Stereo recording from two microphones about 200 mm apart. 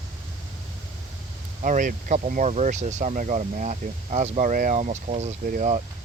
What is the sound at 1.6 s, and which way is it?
Speech, 40° right (ahead or behind).